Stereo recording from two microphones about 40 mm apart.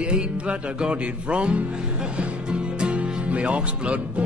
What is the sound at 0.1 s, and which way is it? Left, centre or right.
Music, right.